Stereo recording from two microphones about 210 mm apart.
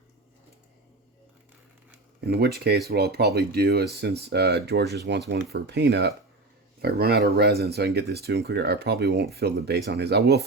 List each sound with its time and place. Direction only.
2.4 s speech: 50° right (ahead or behind)